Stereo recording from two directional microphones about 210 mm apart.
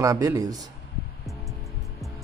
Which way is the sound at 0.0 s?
15° right (ahead or behind).